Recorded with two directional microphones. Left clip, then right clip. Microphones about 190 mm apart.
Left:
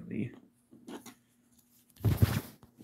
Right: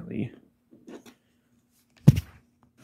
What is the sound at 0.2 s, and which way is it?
Speech, 45° right (ahead or behind).